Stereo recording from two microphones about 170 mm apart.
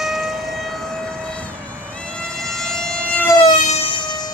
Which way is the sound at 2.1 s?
Centre (ahead or behind).